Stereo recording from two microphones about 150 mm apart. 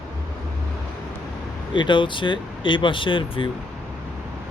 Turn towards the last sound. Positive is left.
turn(degrees=35)  # may be behind; listen again after turning